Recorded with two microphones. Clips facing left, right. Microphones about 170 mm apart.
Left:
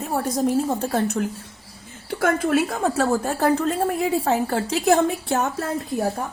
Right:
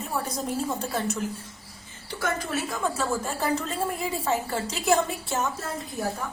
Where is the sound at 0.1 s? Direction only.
50° left (ahead or behind).